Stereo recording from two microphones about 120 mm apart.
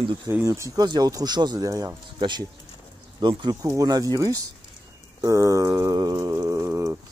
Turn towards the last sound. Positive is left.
turn(degrees=-20)  # may be behind; listen again after turning